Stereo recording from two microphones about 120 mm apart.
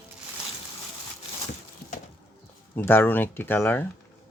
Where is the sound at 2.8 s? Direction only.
20° left (ahead or behind).